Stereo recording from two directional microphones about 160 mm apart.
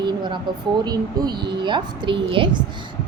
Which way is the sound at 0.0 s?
30° right (ahead or behind).